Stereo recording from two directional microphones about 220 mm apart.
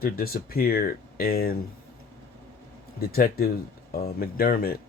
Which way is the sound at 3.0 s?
45° left (ahead or behind).